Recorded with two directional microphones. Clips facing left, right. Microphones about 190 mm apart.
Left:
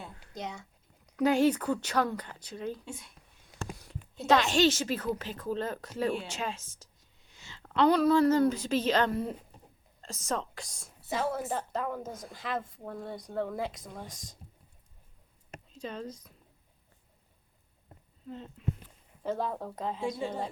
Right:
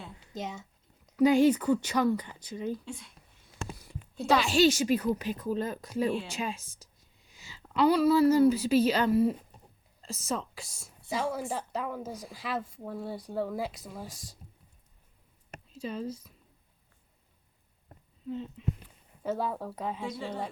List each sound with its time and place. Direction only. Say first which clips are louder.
0.3 s speech: right 2 dB; 20° right (ahead or behind)
4.3 s speech: even; centre (ahead or behind)
4.6 s a woman's voice: right 3 dB; 10° right (ahead or behind)
15.7 s speech: right 4 dB; 10° right (ahead or behind)
18.3 s speech: right 3 dB; centre (ahead or behind)